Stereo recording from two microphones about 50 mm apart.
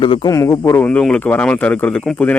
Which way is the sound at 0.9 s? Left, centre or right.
Left.